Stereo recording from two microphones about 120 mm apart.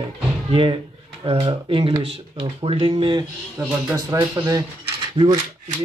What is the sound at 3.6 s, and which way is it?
Speech, 25° right (ahead or behind).